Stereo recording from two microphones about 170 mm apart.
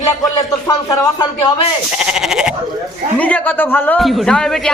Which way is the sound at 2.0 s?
5° right (ahead or behind).